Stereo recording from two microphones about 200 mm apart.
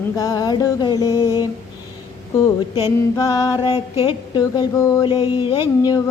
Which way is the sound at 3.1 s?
15° left (ahead or behind).